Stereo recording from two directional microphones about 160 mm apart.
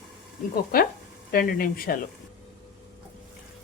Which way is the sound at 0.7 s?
65° left (ahead or behind).